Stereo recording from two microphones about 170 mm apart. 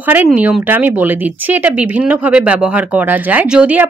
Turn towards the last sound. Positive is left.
turn(degrees=-10)  # may be behind; listen again after turning